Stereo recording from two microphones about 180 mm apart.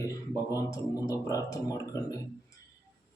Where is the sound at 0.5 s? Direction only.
20° left (ahead or behind).